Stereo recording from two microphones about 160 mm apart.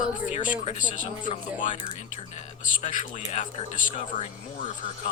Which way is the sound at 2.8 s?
50° left (ahead or behind).